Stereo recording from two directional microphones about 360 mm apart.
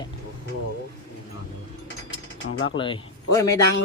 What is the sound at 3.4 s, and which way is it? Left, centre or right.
Speech, centre.